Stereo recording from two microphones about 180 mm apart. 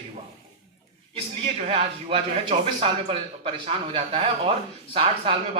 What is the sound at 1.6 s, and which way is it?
Speech, 30° right (ahead or behind).